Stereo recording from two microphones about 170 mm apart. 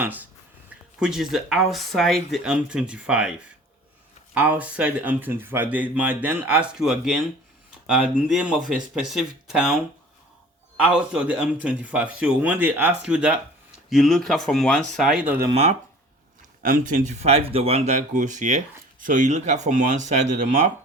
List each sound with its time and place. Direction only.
0.0 s speech: 10° right (ahead or behind)
4.4 s speech: 10° right (ahead or behind)
10.8 s speech: 5° right (ahead or behind)
16.6 s speech: 50° right (ahead or behind)